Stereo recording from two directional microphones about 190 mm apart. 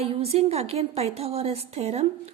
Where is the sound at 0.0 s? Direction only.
30° right (ahead or behind).